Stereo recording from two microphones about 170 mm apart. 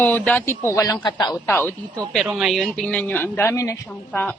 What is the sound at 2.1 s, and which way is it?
Speech, centre (ahead or behind).